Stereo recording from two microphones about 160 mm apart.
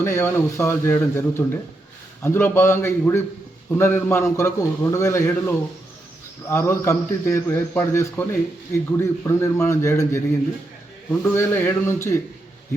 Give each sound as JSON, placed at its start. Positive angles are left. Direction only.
{"t": 0.0, "sound": "a man's voice", "side_deg": 15}